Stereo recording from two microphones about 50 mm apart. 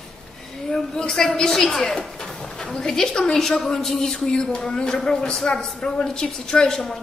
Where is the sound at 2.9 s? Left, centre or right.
Centre.